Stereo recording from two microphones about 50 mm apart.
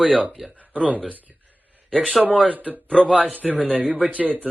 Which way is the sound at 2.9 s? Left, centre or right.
Centre.